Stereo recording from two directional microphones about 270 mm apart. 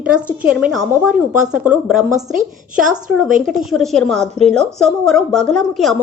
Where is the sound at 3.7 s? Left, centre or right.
Centre.